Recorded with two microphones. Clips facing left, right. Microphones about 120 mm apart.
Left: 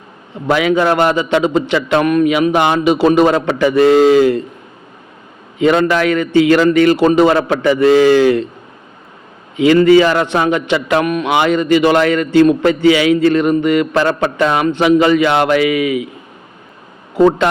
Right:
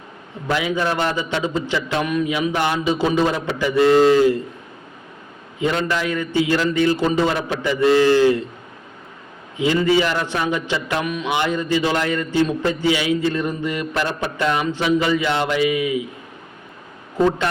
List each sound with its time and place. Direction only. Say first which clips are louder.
0.4 s a man's voice: left 8 dB; 70° left (ahead or behind)
5.5 s a man's voice: left 9 dB; 80° left
9.6 s a man's voice: left 9 dB; 75° left (ahead or behind)